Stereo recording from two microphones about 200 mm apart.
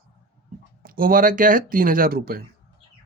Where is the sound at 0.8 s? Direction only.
45° right (ahead or behind).